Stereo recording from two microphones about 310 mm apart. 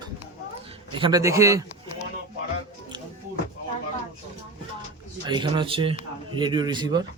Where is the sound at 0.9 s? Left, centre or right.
Centre.